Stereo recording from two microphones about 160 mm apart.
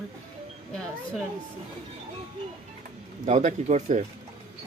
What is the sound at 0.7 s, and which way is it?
Speech, 5° left (ahead or behind).